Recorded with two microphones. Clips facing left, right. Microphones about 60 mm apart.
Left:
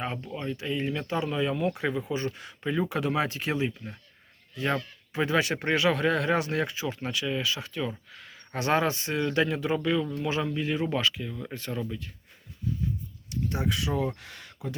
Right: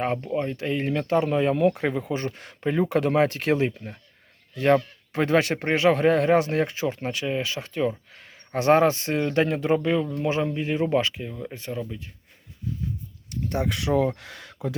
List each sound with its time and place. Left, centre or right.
0.0 s speech: right
5.7 s speech: right
13.3 s speech: right
14.2 s speech: right